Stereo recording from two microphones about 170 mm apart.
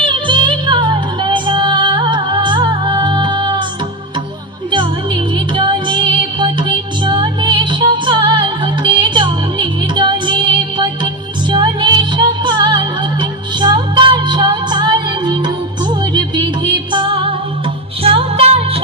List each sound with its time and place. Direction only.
0.1 s music: 30° right (ahead or behind)
5.5 s music: 30° right (ahead or behind)